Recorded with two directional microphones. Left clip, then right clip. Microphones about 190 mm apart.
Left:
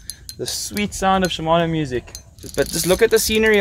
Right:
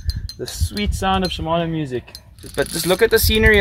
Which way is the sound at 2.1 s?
15° left (ahead or behind).